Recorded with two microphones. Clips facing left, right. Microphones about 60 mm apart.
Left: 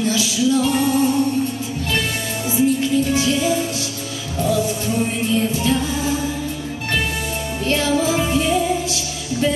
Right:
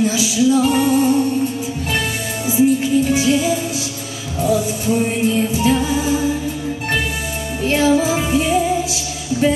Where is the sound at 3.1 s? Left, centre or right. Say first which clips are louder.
Right 2 dB; centre.